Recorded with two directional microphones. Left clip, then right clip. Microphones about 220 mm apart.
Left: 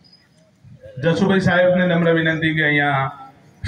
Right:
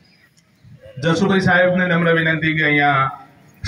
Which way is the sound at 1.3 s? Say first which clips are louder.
Right 1 dB; 15° left (ahead or behind).